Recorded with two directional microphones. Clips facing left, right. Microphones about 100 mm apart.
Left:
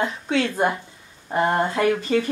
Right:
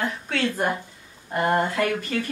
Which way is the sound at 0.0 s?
20° left (ahead or behind).